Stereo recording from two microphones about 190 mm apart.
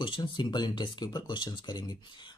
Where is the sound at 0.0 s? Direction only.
25° left (ahead or behind).